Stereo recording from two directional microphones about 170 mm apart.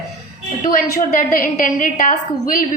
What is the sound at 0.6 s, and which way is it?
A woman's voice, 55° left (ahead or behind).